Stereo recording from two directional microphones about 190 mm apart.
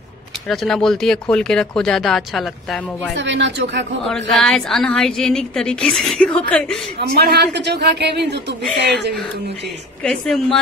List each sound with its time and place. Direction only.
0.5 s a woman's voice: centre (ahead or behind)
3.2 s speech: 70° right (ahead or behind)
4.0 s a woman's voice: centre (ahead or behind)
7.2 s speech: 60° right (ahead or behind)
10.0 s a woman's voice: 5° left (ahead or behind)